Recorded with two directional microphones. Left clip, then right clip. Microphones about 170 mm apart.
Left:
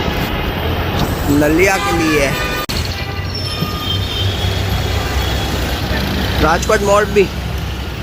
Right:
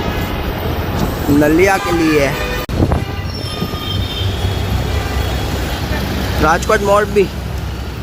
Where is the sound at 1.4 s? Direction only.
20° right (ahead or behind).